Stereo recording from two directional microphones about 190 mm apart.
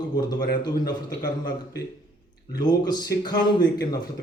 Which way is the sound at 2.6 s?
20° left (ahead or behind).